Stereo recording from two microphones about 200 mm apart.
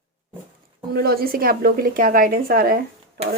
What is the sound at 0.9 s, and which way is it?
A woman's voice, 50° right (ahead or behind).